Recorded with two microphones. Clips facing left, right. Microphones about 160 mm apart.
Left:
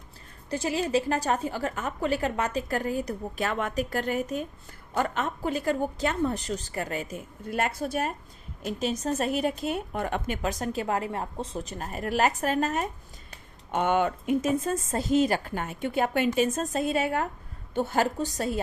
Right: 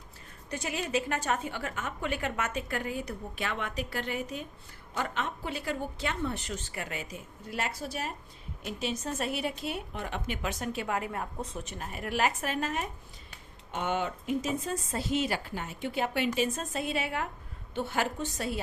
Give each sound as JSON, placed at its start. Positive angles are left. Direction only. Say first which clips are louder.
{"t": 0.5, "sound": "a woman's voice", "louder": "left 6 dB", "side_deg": 30}
{"t": 8.6, "sound": "a woman's voice", "louder": "left 6 dB", "side_deg": 40}
{"t": 13.3, "sound": "a woman's voice", "louder": "left 8 dB", "side_deg": 55}